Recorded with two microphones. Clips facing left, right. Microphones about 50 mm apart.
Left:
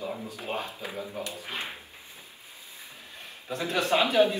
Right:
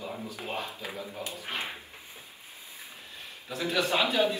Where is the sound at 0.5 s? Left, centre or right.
Left.